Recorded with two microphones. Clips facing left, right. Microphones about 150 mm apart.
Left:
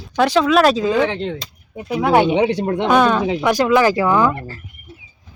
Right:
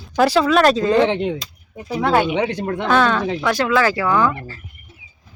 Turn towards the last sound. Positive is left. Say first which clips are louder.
# left 3 dB
turn(degrees=15)  # may be behind; listen again after turning